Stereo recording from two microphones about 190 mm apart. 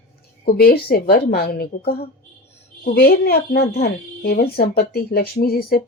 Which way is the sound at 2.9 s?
55° left (ahead or behind).